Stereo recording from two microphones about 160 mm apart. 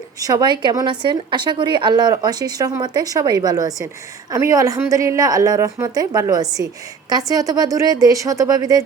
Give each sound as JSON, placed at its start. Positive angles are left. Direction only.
{"t": 0.2, "sound": "a woman's voice", "side_deg": -20}